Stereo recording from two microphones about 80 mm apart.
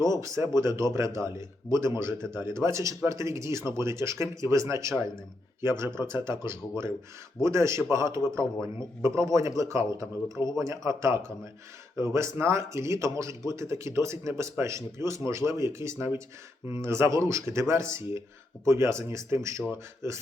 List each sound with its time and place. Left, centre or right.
0.1 s speech: right